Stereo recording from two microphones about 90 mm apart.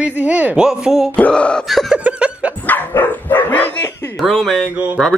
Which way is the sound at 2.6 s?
20° left (ahead or behind).